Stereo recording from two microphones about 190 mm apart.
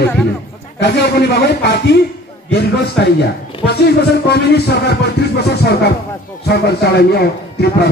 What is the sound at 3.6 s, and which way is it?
Speech, 60° left (ahead or behind).